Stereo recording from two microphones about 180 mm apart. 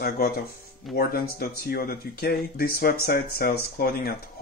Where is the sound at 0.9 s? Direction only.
55° left (ahead or behind).